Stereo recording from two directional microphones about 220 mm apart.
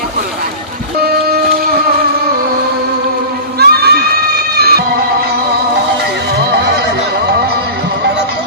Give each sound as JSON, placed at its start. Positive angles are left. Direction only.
{"t": 3.5, "sound": "crowd", "side_deg": -45}